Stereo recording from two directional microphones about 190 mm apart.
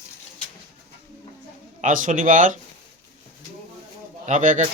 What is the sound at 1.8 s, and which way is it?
Speech, 45° right (ahead or behind).